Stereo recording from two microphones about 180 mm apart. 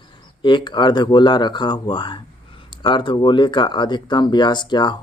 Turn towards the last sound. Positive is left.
turn(degrees=25)  # may be behind; listen again after turning